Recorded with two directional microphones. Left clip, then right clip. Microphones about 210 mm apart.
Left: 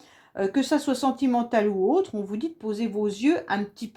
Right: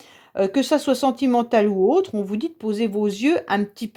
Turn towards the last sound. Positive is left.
turn(degrees=-45)  # may be behind; listen again after turning